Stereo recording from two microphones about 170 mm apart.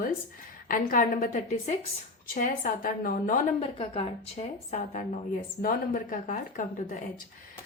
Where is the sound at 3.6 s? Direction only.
35° left (ahead or behind).